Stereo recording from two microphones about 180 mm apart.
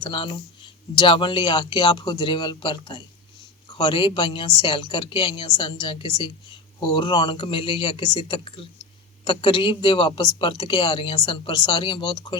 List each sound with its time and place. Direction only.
0.0 s speech: 30° left (ahead or behind)